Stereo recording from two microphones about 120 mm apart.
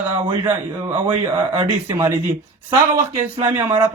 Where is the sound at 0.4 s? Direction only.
20° right (ahead or behind).